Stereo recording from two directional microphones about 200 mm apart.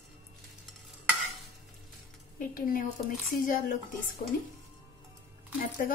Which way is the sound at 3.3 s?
40° left (ahead or behind).